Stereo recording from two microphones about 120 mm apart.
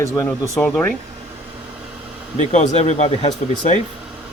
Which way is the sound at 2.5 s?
70° left (ahead or behind).